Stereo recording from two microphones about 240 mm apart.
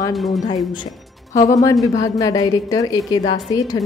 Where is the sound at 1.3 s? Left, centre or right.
Left.